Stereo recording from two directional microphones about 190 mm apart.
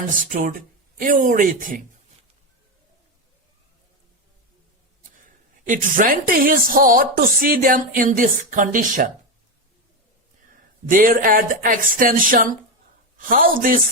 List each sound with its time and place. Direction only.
0.1 s speech: 45° right (ahead or behind)
5.6 s speech: 45° right (ahead or behind)
10.8 s speech: 45° right (ahead or behind)